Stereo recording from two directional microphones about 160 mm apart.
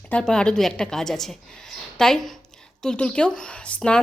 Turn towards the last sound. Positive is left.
turn(degrees=5)  # may be behind; listen again after turning